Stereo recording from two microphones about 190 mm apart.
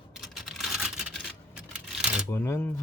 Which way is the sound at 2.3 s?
10° left (ahead or behind).